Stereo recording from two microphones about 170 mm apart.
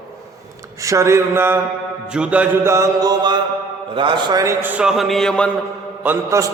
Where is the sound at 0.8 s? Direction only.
15° right (ahead or behind); by 5.5 s 5° left (ahead or behind).